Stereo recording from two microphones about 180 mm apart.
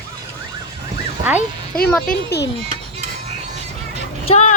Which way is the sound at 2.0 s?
65° left (ahead or behind).